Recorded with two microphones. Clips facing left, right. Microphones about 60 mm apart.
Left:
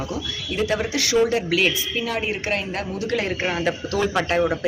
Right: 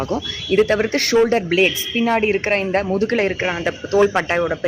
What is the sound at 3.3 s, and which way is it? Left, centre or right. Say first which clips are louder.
Speech: right 2 dB; centre.